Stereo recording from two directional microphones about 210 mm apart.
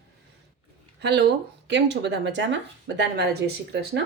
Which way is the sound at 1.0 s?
50° right (ahead or behind).